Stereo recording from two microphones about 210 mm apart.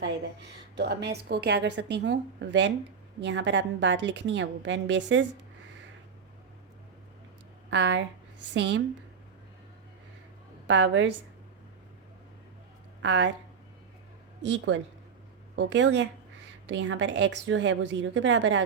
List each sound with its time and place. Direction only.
0.8 s a woman's voice: 55° right (ahead or behind)
7.7 s a woman's voice: 60° right (ahead or behind)
10.7 s a woman's voice: 60° right (ahead or behind)
13.0 s a woman's voice: 60° right (ahead or behind)
14.5 s a woman's voice: 60° right (ahead or behind)